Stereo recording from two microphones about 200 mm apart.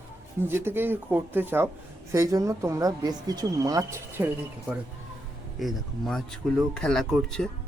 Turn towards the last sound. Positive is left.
turn(degrees=0)  # may be behind; listen again after turning